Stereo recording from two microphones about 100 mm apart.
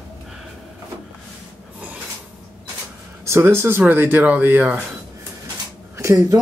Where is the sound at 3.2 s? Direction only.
25° right (ahead or behind).